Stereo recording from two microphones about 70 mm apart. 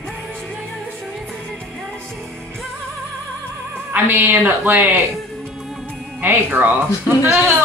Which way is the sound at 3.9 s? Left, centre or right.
Right.